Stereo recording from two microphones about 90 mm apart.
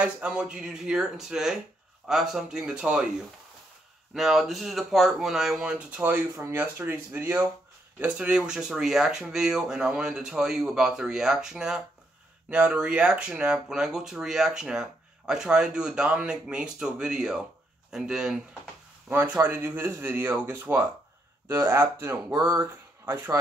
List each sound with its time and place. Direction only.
0.0 s speech: 10° right (ahead or behind)
6.0 s speech: 25° right (ahead or behind)
8.0 s speech: 10° right (ahead or behind)
19.0 s speech: 20° right (ahead or behind)